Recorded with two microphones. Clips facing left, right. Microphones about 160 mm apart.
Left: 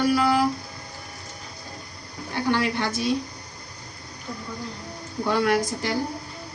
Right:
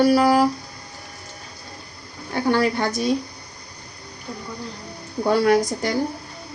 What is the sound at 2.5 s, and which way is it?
Speech, 40° right (ahead or behind).